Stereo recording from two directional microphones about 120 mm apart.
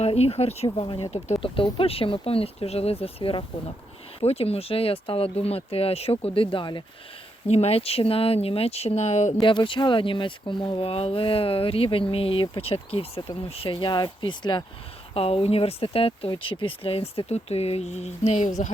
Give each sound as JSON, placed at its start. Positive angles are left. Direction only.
{"t": 0.0, "sound": "speech", "side_deg": 60}
{"t": 0.9, "sound": "speech", "side_deg": 40}
{"t": 1.1, "sound": "speech", "side_deg": 55}
{"t": 7.4, "sound": "speech", "side_deg": 60}
{"t": 9.4, "sound": "speech", "side_deg": 45}
{"t": 15.1, "sound": "speech", "side_deg": 55}